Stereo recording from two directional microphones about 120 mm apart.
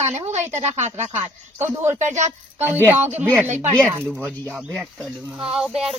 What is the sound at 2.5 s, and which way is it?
Speech, 15° right (ahead or behind).